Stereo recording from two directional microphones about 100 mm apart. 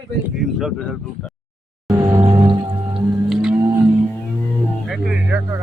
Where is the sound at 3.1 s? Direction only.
5° right (ahead or behind).